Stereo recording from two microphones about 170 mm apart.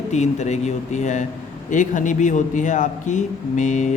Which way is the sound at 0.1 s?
40° left (ahead or behind).